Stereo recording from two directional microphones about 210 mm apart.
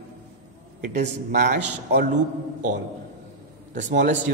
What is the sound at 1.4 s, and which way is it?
Speech, 50° right (ahead or behind).